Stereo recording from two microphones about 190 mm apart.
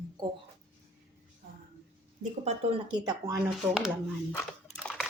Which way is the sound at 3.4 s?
5° right (ahead or behind).